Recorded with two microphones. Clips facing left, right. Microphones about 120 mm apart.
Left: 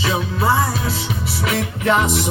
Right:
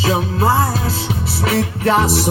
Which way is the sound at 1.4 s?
35° right (ahead or behind).